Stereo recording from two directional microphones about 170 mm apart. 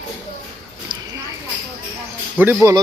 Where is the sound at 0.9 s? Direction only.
30° right (ahead or behind).